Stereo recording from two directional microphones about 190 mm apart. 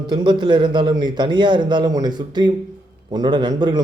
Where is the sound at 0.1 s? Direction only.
25° right (ahead or behind).